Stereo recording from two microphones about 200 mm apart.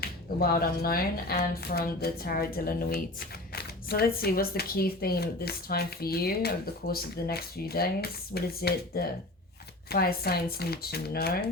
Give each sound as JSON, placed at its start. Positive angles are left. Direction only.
{"t": 0.0, "sound": "speech", "side_deg": 50}